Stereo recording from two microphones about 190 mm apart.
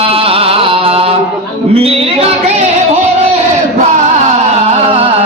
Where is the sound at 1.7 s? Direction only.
30° right (ahead or behind).